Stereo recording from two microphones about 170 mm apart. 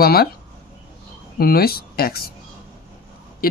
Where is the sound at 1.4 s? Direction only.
65° left (ahead or behind).